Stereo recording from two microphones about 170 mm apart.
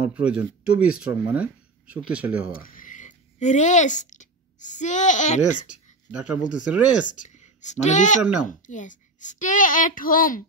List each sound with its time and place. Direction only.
0.0 s speech: 5° right (ahead or behind)
2.5 s speech: 55° left (ahead or behind)
6.5 s speech: 5° right (ahead or behind)
7.1 s a woman's voice: 45° left (ahead or behind)